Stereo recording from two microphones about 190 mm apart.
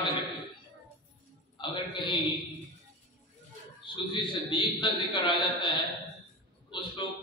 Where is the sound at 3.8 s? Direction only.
25° left (ahead or behind).